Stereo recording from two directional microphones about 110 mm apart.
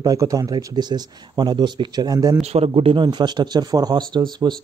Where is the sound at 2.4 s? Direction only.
70° right (ahead or behind).